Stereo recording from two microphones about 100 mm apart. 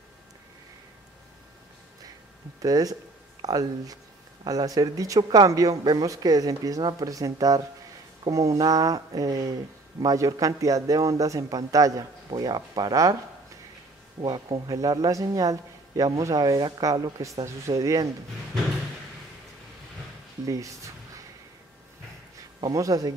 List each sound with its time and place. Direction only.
2.6 s speech: 40° right (ahead or behind)
14.7 s speech: 35° right (ahead or behind)
17.5 s speech: 30° right (ahead or behind)
20.4 s speech: 35° right (ahead or behind)
22.7 s speech: 35° right (ahead or behind)